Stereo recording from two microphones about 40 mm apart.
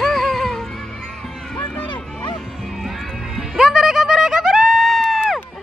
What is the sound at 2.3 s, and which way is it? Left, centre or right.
Music, centre.